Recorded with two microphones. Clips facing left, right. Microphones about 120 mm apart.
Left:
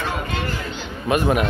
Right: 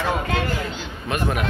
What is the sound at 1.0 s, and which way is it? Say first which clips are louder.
Speech: left 5 dB; 10° left (ahead or behind).